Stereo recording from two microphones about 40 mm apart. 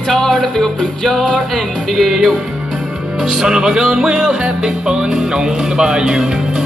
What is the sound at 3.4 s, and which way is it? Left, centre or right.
Speech, centre.